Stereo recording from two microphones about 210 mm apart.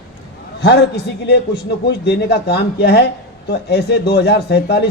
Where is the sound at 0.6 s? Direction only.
50° left (ahead or behind).